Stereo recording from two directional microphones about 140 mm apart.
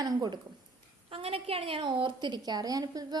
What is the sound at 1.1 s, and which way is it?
A woman's voice, 45° right (ahead or behind).